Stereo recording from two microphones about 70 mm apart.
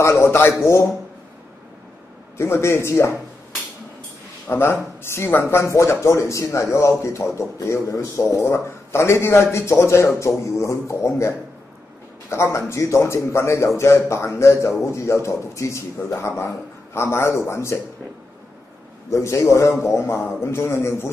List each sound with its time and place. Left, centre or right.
0.0 s a man's voice: left
2.3 s a man's voice: left
4.5 s a man's voice: left
5.6 s a man's voice: left
19.0 s a man's voice: left